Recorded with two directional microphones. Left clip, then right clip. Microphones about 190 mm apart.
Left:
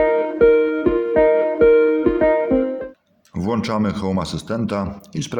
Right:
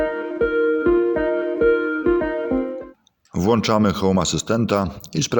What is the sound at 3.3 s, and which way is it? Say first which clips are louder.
Speech: right 4 dB; 40° right (ahead or behind).